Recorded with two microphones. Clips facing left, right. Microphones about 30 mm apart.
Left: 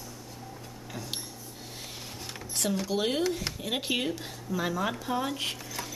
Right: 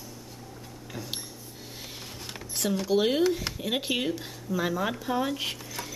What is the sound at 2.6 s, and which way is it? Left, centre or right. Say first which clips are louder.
Speech: right 4 dB; centre.